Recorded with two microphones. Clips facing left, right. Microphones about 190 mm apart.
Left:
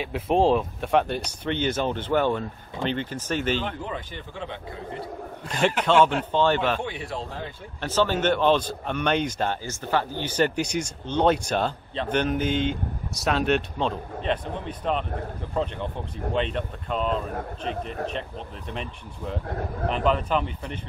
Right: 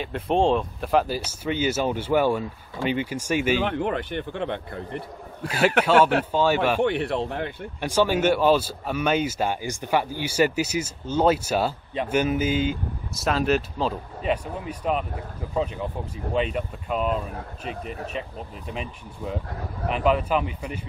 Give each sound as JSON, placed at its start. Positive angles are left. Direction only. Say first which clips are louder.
{"t": 0.0, "sound": "speech", "louder": "left 1 dB", "side_deg": 0}
{"t": 3.6, "sound": "speech", "louder": "right 7 dB", "side_deg": -65}
{"t": 5.5, "sound": "speech", "louder": "right 2 dB", "side_deg": -5}
{"t": 6.8, "sound": "speech", "louder": "right 9 dB", "side_deg": -65}
{"t": 7.8, "sound": "speech", "louder": "right 2 dB", "side_deg": -10}
{"t": 18.7, "sound": "speech", "louder": "right 1 dB", "side_deg": -5}